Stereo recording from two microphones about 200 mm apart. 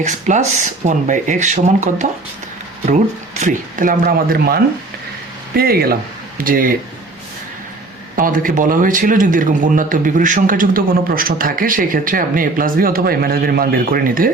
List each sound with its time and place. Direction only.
0.0 s speech: 35° right (ahead or behind)
3.4 s speech: 40° right (ahead or behind)
8.1 s speech: 45° right (ahead or behind)